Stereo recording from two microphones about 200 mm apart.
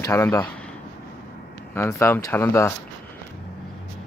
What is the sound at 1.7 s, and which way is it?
Speech, 15° left (ahead or behind).